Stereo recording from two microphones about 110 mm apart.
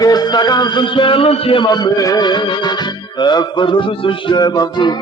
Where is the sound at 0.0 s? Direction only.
40° left (ahead or behind); by 1.6 s 60° left (ahead or behind).